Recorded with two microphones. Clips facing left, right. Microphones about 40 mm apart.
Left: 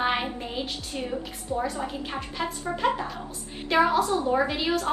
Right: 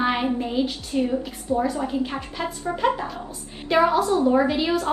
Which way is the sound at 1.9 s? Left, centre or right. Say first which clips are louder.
Right 6 dB; centre.